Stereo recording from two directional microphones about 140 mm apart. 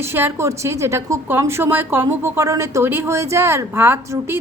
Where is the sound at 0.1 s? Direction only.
15° right (ahead or behind).